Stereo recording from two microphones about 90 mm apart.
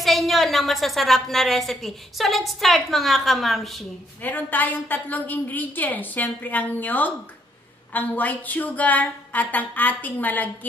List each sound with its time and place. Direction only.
0.0 s a woman's voice: centre (ahead or behind)
4.2 s a woman's voice: 20° left (ahead or behind)